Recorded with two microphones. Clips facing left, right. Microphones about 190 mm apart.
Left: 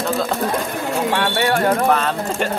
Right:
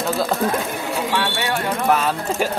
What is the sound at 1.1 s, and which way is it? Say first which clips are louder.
Speech: left 5 dB; 50° left (ahead or behind).